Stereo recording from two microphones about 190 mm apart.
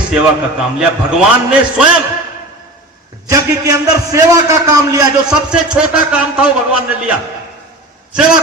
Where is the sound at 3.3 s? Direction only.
20° right (ahead or behind).